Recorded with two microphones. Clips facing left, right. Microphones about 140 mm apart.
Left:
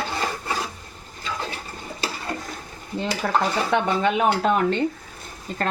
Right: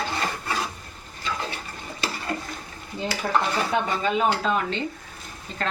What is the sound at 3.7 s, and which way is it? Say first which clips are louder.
Speech: left 3 dB; 65° left (ahead or behind).